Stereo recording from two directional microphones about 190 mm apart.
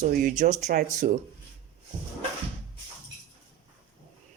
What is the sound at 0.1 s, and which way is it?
Speech, 45° right (ahead or behind).